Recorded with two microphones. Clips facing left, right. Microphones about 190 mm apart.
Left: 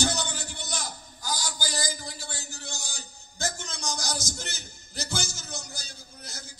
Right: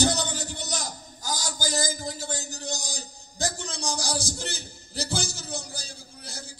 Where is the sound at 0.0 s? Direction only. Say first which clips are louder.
Right 4 dB; 35° right (ahead or behind).